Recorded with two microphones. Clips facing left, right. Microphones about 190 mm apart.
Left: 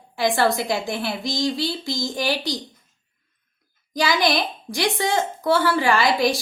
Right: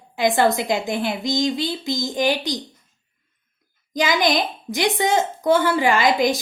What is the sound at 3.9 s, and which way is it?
A woman's voice, 20° right (ahead or behind).